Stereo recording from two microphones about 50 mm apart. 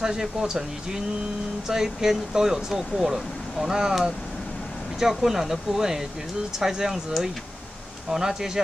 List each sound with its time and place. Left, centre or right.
0.0 s speech: centre